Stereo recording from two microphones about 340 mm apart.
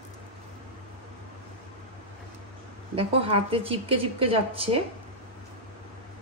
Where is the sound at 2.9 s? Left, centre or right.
Centre.